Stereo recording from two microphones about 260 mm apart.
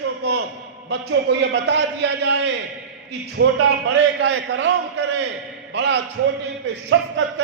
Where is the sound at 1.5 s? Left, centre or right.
Right.